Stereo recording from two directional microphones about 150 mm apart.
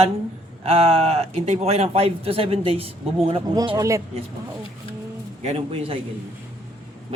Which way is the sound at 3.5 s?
30° right (ahead or behind).